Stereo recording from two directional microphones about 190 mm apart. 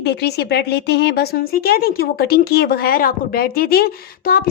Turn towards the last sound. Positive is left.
turn(degrees=50)  # may be behind; listen again after turning